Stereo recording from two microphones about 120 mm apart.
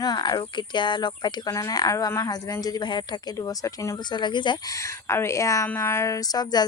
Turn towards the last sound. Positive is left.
turn(degrees=35)  # may be behind; listen again after turning